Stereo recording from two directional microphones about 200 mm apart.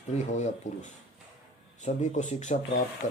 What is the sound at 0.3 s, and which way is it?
Speech, 35° left (ahead or behind).